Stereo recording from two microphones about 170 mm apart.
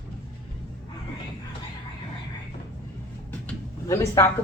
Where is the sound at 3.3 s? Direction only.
15° left (ahead or behind).